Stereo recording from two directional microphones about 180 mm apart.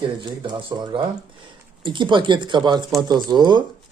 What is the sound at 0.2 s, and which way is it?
A man's voice, 25° right (ahead or behind).